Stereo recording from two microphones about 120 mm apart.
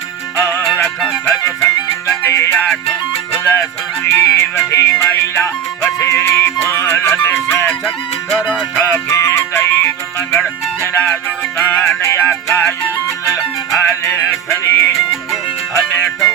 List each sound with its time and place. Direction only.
0.3 s music: 20° left (ahead or behind)
13.8 s music: 20° left (ahead or behind)